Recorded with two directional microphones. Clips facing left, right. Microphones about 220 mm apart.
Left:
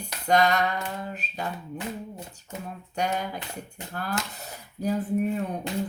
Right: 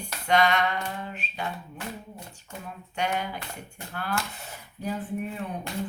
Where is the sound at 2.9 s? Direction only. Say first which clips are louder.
Left 1 dB; 40° left (ahead or behind).